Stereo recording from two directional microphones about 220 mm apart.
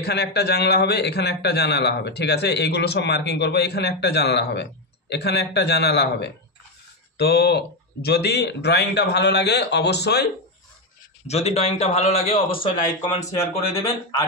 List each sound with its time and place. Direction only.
0.0 s a man's voice: 50° left (ahead or behind)
11.2 s a man's voice: 30° left (ahead or behind)